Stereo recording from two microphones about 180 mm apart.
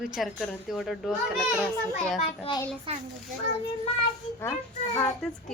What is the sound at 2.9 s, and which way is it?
Speech, 30° right (ahead or behind).